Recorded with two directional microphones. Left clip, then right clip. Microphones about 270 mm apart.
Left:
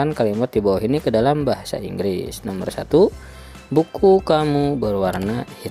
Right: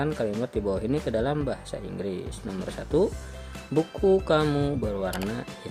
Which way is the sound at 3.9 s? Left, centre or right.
Left.